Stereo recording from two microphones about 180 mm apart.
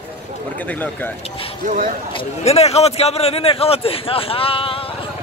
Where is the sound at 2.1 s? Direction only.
35° left (ahead or behind).